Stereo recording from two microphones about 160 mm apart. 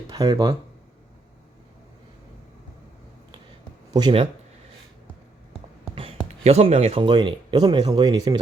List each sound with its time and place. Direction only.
0.1 s speech: 25° right (ahead or behind)
3.9 s speech: 30° right (ahead or behind)
5.8 s speech: 35° right (ahead or behind)